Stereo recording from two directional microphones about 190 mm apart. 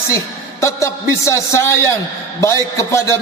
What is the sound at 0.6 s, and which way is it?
A man's voice, 15° left (ahead or behind).